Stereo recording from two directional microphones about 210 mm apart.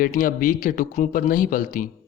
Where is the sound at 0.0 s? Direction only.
40° left (ahead or behind).